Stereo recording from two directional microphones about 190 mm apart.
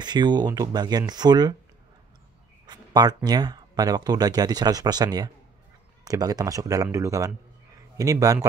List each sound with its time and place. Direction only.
0.0 s speech: 25° right (ahead or behind)
2.6 s a sound: 20° right (ahead or behind)
3.3 s speech: 20° right (ahead or behind)